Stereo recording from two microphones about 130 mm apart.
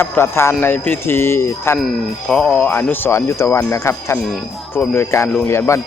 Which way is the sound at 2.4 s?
15° left (ahead or behind).